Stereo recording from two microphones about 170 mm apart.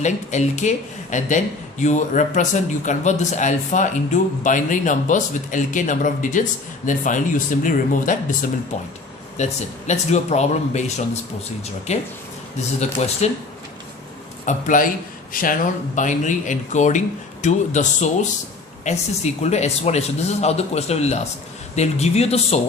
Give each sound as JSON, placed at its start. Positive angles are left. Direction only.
{"t": 0.0, "sound": "a man's voice", "side_deg": 45}
{"t": 14.4, "sound": "a man's voice", "side_deg": 50}